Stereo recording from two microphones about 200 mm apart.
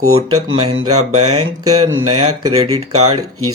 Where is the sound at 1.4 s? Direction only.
90° right.